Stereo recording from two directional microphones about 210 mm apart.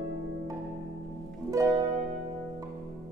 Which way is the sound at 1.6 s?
15° right (ahead or behind).